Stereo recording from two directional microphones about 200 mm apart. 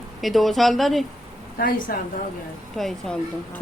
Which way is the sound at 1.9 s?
45° left (ahead or behind).